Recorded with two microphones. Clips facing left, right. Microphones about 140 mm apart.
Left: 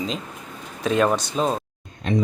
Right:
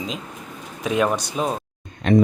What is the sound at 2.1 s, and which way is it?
Speech, 75° right (ahead or behind).